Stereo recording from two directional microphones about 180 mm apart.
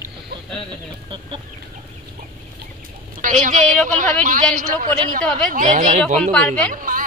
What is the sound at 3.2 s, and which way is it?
A woman's voice, 45° right (ahead or behind).